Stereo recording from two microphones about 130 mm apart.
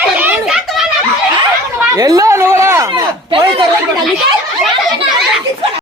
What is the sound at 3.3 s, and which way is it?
Speech, 45° right (ahead or behind).